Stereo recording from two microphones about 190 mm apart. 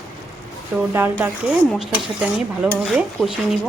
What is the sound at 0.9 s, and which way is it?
Speech, 10° right (ahead or behind).